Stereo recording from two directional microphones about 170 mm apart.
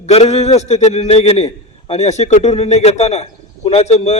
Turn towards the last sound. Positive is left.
turn(degrees=40)  # may be behind; listen again after turning